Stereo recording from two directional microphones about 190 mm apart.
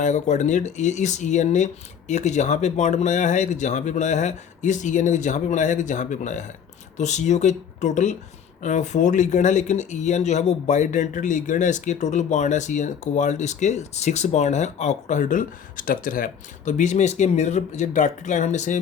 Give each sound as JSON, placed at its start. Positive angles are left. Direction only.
{"t": 0.0, "sound": "speech", "side_deg": 40}